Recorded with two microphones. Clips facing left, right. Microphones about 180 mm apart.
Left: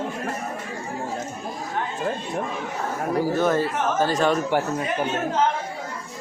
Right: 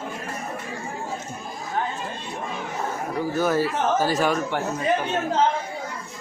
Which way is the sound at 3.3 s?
5° right (ahead or behind).